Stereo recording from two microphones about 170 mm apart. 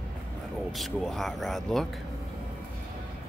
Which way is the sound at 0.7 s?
Centre (ahead or behind).